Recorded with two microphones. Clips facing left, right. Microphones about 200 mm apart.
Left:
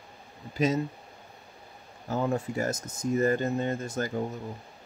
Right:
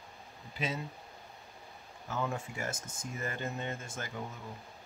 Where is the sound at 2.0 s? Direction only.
40° left (ahead or behind).